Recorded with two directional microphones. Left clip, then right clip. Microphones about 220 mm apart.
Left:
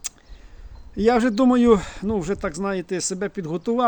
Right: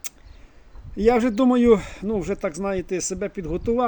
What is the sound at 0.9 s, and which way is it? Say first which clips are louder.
Speech: even; 5° left (ahead or behind).